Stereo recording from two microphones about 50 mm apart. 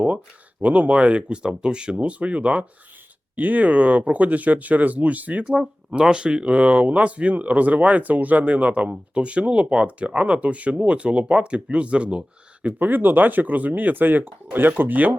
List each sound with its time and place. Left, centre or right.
0.6 s speech: right
5.5 s speech: right
12.6 s speech: right